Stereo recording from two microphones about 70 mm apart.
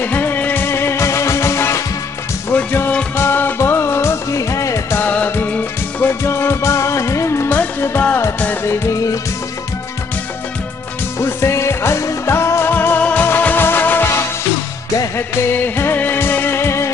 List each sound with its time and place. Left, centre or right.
0.0 s music: left
2.5 s music: left
4.9 s music: left
6.2 s music: left
8.9 s music: left
11.1 s music: left
12.7 s music: left